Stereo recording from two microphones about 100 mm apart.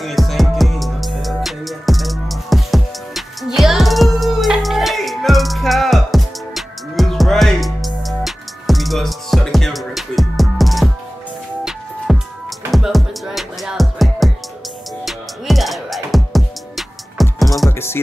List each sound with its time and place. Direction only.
0.0 s music: centre (ahead or behind)
12.1 s music: centre (ahead or behind)
17.6 s music: 25° left (ahead or behind)